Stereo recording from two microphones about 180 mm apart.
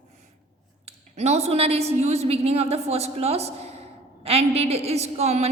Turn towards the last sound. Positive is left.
turn(degrees=-35)  # may be behind; listen again after turning